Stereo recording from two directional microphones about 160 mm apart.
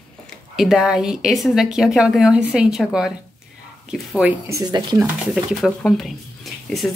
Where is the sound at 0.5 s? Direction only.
Centre (ahead or behind).